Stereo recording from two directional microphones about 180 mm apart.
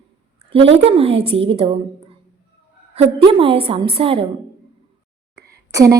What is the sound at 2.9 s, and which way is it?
A woman's voice, 30° right (ahead or behind).